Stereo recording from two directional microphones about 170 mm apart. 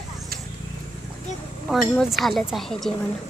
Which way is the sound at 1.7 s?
Centre (ahead or behind).